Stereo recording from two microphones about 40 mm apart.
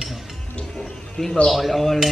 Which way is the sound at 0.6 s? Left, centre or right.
Centre.